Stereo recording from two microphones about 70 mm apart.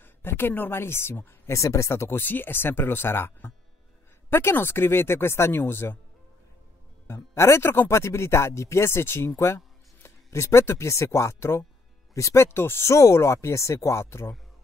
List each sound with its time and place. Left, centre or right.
0.0 s a woman's voice: left
1.6 s speech: left
7.3 s speech: left
12.4 s speech: left
12.9 s speech: left